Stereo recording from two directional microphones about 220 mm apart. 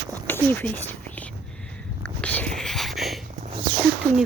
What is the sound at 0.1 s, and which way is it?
Whispering, 10° left (ahead or behind).